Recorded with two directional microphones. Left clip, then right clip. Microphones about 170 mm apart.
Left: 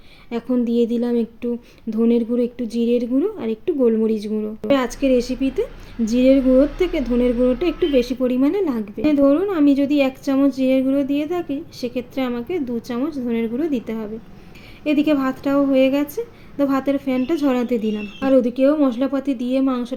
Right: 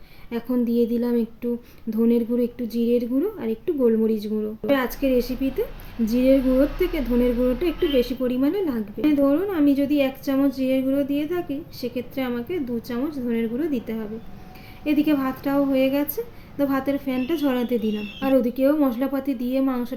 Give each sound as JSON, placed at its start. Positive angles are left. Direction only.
{"t": 0.3, "sound": "a woman's voice", "side_deg": 20}